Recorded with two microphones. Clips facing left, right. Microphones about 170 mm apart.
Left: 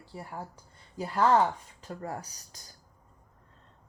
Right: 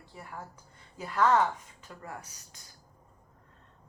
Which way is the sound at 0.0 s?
30° left (ahead or behind).